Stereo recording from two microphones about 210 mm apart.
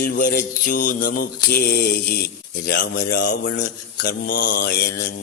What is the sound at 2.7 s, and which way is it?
Mantra, 45° left (ahead or behind).